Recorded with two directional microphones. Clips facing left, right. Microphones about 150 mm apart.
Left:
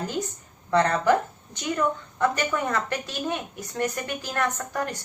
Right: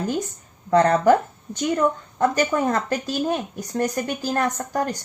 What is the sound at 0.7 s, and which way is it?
A woman's voice, 45° right (ahead or behind).